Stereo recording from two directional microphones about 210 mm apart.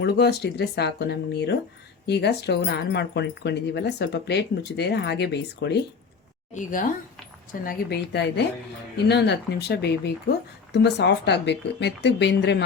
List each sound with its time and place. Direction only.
0.0 s speech: 50° left (ahead or behind)
6.5 s speech: 40° left (ahead or behind); by 12.6 s 55° left (ahead or behind)